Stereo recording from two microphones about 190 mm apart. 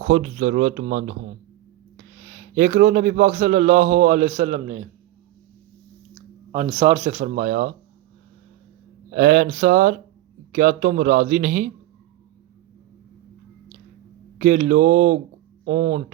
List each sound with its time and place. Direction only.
0.0 s a man's voice: 50° right (ahead or behind); by 4.8 s 35° right (ahead or behind)
6.5 s speech: 30° right (ahead or behind); by 7.7 s 45° right (ahead or behind)
9.1 s a man's voice: 45° right (ahead or behind)
14.3 s speech: 40° right (ahead or behind)